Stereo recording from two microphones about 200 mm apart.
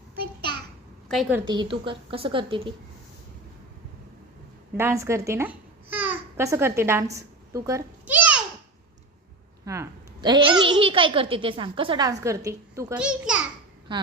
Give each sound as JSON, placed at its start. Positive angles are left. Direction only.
{"t": 1.0, "sound": "a woman's voice", "side_deg": 0}
{"t": 1.5, "sound": "a woman's voice", "side_deg": -25}
{"t": 4.8, "sound": "a child's voice", "side_deg": -15}
{"t": 9.6, "sound": "a woman's voice", "side_deg": -15}
{"t": 13.9, "sound": "a woman's voice", "side_deg": -25}